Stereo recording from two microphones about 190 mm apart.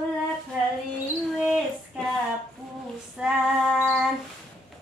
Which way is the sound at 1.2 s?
Centre (ahead or behind).